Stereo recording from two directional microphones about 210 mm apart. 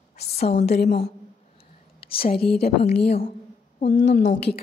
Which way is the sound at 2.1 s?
25° left (ahead or behind).